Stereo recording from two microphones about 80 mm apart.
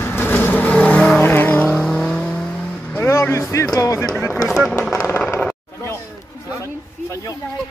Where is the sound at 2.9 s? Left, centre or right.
Left.